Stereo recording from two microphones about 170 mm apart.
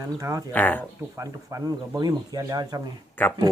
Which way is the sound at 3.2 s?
10° left (ahead or behind).